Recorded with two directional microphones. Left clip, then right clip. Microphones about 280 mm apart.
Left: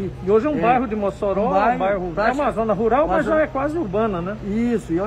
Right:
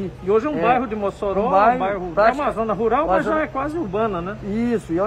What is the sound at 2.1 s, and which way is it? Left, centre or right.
Speech, centre.